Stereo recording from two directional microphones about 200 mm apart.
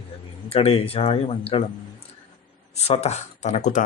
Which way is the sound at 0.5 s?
30° left (ahead or behind).